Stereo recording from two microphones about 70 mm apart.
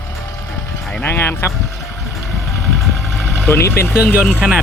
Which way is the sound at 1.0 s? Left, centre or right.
Left.